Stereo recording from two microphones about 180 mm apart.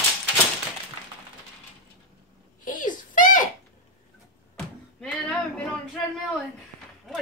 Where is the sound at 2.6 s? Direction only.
45° left (ahead or behind).